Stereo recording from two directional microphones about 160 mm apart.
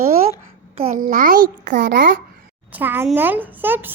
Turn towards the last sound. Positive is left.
turn(degrees=-10)  # may be behind; listen again after turning